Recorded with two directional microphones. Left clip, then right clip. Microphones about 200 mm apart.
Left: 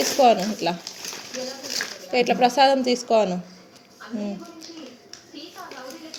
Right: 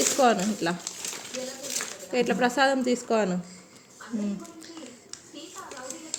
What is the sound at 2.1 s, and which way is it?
Speech, 45° right (ahead or behind).